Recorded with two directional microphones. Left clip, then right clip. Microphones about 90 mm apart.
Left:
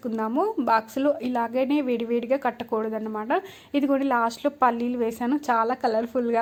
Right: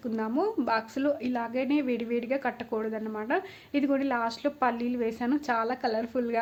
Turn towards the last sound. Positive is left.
turn(degrees=30)  # may be behind; listen again after turning